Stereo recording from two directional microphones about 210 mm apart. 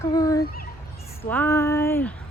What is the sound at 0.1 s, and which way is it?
Fowl, 15° left (ahead or behind).